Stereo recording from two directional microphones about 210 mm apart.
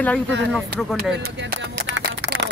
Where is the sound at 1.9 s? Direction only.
55° right (ahead or behind).